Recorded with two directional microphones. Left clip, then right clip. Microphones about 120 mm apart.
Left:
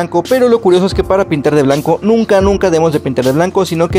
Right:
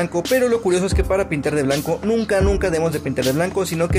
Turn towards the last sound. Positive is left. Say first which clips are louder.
# left 8 dB
turn(degrees=70)  # may be behind; listen again after turning